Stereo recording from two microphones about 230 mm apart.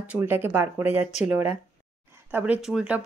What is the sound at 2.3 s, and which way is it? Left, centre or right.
Speech, centre.